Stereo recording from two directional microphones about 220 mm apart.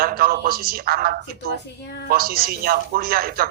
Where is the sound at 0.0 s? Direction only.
40° right (ahead or behind).